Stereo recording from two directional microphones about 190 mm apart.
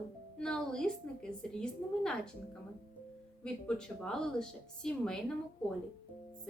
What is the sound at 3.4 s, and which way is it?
A woman's voice, 5° left (ahead or behind).